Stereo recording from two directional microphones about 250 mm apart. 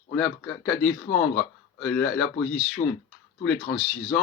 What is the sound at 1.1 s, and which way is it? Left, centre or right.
Speech, left.